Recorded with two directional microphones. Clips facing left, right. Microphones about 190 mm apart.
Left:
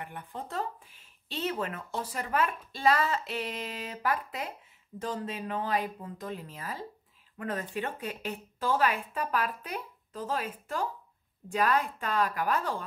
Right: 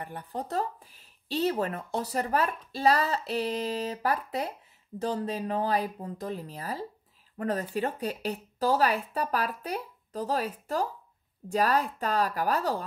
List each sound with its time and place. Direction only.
0.0 s speech: 35° right (ahead or behind)